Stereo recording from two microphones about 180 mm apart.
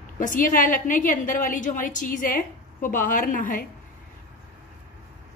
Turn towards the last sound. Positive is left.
turn(degrees=50)  # may be behind; listen again after turning